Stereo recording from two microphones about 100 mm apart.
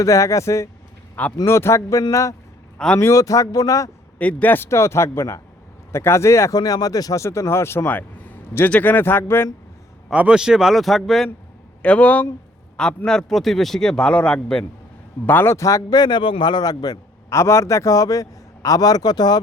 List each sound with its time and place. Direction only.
0.0 s a man's voice: 30° left (ahead or behind)
2.7 s a man's voice: 10° left (ahead or behind)
3.0 s a man's voice: 30° left (ahead or behind)
4.2 s speech: 15° left (ahead or behind)
6.6 s speech: 40° left (ahead or behind); by 9.5 s 25° left (ahead or behind)
10.1 s a man's voice: 10° right (ahead or behind)
11.8 s a man's voice: 15° left (ahead or behind)
15.3 s speech: 20° left (ahead or behind)
15.5 s a man's voice: 35° left (ahead or behind)